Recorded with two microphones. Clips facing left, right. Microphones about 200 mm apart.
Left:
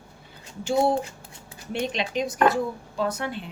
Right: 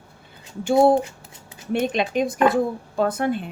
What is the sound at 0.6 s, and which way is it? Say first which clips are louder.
A woman's voice: right 6 dB; 55° right (ahead or behind).